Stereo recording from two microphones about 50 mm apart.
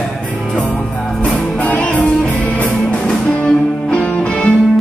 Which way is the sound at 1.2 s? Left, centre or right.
Left.